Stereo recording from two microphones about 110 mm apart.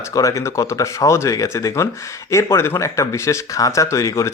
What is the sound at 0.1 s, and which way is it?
Speech, 30° left (ahead or behind).